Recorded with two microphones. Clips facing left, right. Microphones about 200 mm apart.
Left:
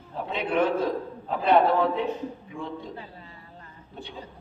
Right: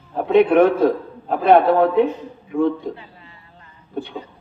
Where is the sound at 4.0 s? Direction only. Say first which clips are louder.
Right 13 dB; 55° right (ahead or behind).